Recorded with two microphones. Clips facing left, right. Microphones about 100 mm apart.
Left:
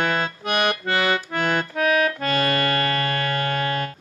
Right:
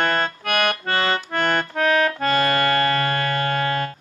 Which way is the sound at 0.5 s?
20° left (ahead or behind).